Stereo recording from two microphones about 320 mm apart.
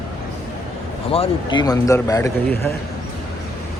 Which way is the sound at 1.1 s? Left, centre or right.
Centre.